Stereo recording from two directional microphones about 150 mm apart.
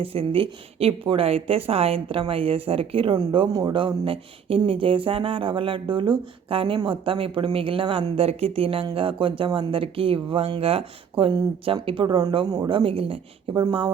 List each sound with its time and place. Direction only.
0.0 s speech: 40° right (ahead or behind)